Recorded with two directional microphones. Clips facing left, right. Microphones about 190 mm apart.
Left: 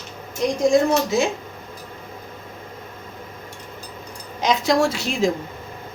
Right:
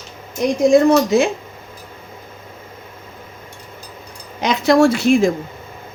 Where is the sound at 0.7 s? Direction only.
60° right (ahead or behind).